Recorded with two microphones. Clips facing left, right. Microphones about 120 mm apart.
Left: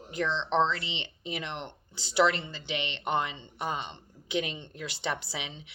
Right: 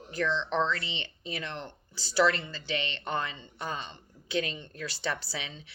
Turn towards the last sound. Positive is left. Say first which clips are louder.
# left 1 dB
turn(degrees=20)  # may be behind; listen again after turning